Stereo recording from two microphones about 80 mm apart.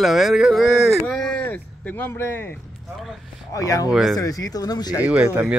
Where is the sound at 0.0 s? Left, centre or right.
Centre.